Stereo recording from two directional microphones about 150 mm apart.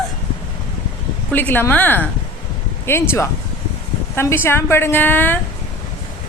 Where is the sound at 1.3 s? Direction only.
15° left (ahead or behind).